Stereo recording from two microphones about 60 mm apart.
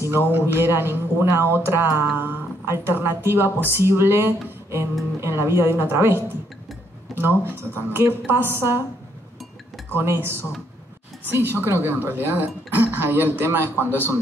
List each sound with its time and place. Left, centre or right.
0.3 s speech: right
9.8 s speech: right
13.8 s a man's voice: left